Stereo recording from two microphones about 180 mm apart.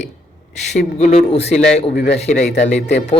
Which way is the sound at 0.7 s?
40° left (ahead or behind).